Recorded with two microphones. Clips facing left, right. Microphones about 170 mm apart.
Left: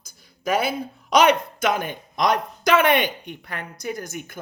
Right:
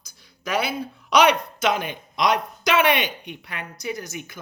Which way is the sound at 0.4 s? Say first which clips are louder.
Left 2 dB; 50° left (ahead or behind).